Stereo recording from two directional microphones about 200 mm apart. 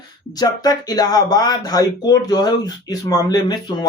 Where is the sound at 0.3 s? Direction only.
20° left (ahead or behind).